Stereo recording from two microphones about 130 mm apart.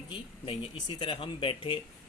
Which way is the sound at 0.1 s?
45° left (ahead or behind).